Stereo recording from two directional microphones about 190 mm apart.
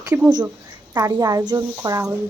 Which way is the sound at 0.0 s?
20° right (ahead or behind).